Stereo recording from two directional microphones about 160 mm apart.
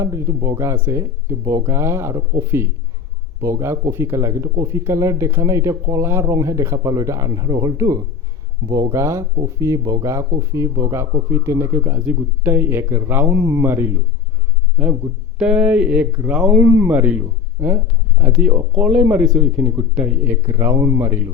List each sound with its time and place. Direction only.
0.0 s a man's voice: 20° right (ahead or behind)